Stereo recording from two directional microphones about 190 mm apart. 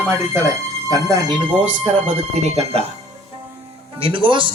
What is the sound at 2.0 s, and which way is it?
Speech, 35° right (ahead or behind).